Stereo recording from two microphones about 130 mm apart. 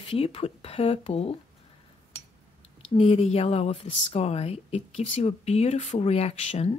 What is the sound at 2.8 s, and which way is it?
Speech, 55° left (ahead or behind).